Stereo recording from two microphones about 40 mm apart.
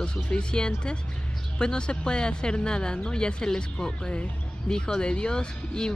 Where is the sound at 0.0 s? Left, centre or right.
Left.